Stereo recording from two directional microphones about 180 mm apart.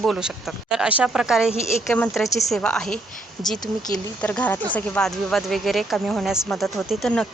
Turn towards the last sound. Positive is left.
turn(degrees=0)  # may be behind; listen again after turning